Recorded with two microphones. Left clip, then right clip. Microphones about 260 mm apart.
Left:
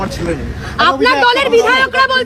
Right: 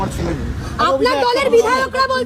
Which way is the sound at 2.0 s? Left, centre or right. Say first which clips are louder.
Left 5 dB; right.